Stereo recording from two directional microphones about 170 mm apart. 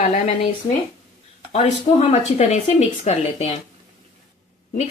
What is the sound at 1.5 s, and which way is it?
A woman's voice, 40° left (ahead or behind).